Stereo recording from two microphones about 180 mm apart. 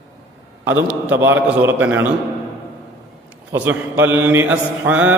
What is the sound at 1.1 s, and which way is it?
Mantra, 10° right (ahead or behind).